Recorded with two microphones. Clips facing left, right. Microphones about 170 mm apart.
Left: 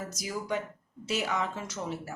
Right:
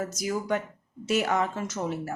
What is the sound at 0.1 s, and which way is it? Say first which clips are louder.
Speech: right 5 dB; 50° right (ahead or behind).